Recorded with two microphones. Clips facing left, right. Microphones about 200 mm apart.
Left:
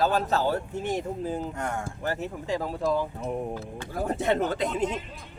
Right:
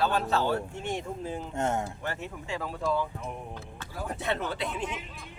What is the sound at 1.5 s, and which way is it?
Speech, 25° right (ahead or behind).